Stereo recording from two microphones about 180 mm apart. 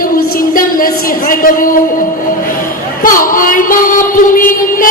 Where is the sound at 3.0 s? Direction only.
50° left (ahead or behind).